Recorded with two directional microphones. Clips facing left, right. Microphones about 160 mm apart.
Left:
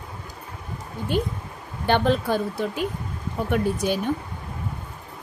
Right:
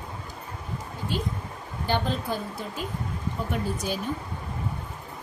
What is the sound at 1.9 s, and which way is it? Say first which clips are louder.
A woman's voice: left 7 dB; 70° left (ahead or behind).